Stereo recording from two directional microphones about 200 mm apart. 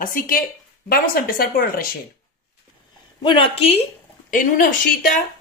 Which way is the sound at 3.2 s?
25° left (ahead or behind).